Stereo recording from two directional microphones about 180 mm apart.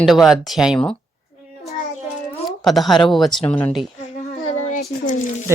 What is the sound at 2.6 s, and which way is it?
Speech, centre (ahead or behind).